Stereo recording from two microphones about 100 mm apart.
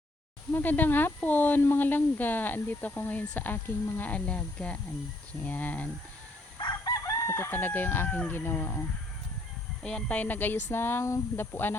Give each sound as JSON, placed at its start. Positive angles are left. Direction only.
{"t": 0.5, "sound": "speech", "side_deg": 20}
{"t": 6.6, "sound": "chicken", "side_deg": 40}
{"t": 9.8, "sound": "speech", "side_deg": 10}